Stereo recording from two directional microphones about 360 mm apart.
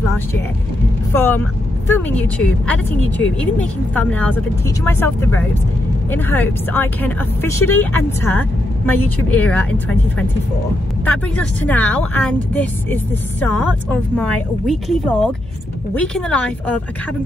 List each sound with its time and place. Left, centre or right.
1.1 s speech: centre